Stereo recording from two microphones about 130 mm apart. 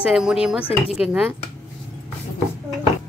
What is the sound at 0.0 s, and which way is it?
Speech, 5° right (ahead or behind).